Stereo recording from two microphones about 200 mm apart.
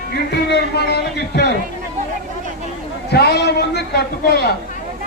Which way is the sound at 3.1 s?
55° left (ahead or behind).